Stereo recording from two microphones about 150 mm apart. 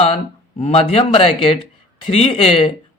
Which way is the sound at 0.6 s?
40° left (ahead or behind).